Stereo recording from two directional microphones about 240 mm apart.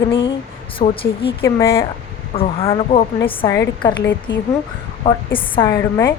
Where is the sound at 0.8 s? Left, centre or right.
Left.